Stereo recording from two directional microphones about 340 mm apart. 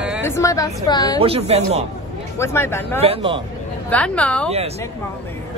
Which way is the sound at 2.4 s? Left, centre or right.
Centre.